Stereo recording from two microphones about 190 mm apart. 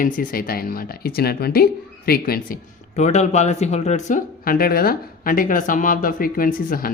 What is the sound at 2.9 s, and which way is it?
Speech, 35° left (ahead or behind).